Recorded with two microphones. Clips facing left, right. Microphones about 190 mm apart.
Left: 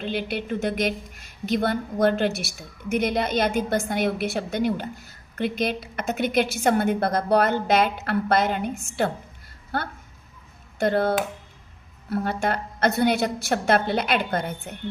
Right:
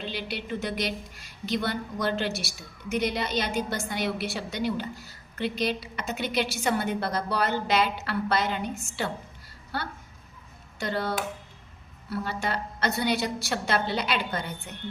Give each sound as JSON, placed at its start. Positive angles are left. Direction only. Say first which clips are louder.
{"t": 0.0, "sound": "a woman's voice", "louder": "left 6 dB", "side_deg": 50}